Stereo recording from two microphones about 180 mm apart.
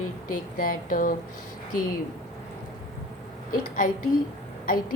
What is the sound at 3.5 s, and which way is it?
Speech, 50° left (ahead or behind).